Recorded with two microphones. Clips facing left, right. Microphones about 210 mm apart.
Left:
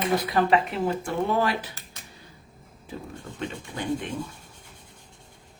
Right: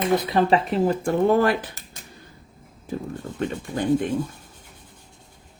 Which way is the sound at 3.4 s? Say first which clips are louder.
Right 7 dB; 45° right (ahead or behind).